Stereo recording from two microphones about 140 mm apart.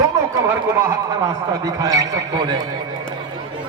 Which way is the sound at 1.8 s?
25° right (ahead or behind).